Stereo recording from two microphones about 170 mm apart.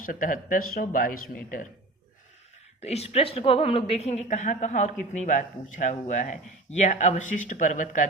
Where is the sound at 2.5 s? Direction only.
40° left (ahead or behind).